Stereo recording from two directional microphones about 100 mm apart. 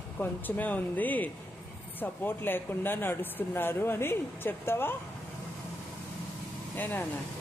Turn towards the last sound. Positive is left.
turn(degrees=20)  # may be behind; listen again after turning